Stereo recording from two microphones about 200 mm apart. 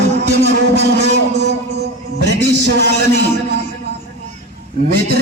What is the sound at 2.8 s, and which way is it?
Speech, 55° right (ahead or behind).